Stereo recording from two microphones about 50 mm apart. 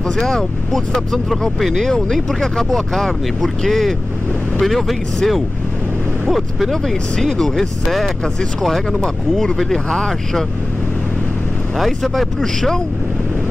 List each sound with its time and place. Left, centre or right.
0.2 s speech: centre
6.7 s speech: centre
11.8 s speech: centre